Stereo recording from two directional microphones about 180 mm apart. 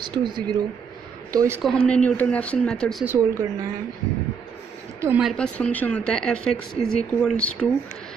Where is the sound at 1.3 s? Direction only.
15° right (ahead or behind).